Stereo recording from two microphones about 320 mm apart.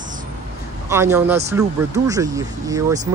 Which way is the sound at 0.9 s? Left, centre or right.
Centre.